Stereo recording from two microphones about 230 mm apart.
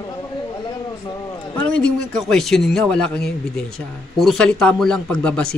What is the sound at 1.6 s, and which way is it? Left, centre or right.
A man's voice, centre.